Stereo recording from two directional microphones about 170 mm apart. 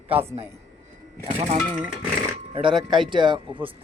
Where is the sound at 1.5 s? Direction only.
5° right (ahead or behind).